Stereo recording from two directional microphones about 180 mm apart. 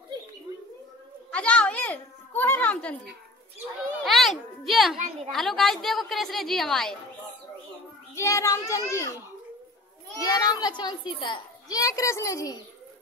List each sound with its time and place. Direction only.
0.5 s bird: 20° right (ahead or behind)
1.3 s a child's voice: 5° left (ahead or behind)
4.0 s speech: centre (ahead or behind)
4.9 s a woman's voice: 40° right (ahead or behind)
5.3 s a woman's voice: centre (ahead or behind)
8.1 s a child's voice: 15° left (ahead or behind)
10.2 s a child's voice: 20° left (ahead or behind)